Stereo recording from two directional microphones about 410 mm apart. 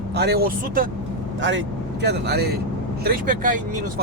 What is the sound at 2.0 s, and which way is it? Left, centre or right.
Speech, right.